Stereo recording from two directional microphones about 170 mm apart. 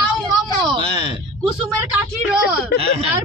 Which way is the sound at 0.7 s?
25° right (ahead or behind).